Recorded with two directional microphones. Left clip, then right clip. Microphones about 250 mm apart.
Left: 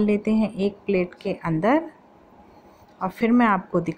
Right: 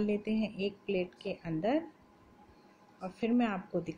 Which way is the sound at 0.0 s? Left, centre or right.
Centre.